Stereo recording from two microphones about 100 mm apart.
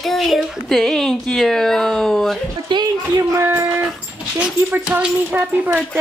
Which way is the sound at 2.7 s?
50° right (ahead or behind).